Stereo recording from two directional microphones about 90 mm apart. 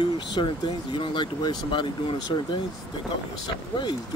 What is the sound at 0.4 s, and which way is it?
Speech, 60° left (ahead or behind).